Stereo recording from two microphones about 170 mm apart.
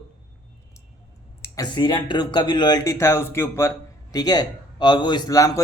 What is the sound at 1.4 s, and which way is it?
A man's voice, 25° left (ahead or behind).